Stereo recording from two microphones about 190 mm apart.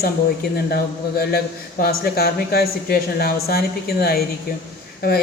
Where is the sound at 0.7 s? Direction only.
55° left (ahead or behind).